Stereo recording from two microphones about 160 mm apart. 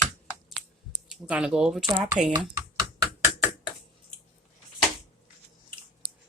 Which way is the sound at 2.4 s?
25° right (ahead or behind).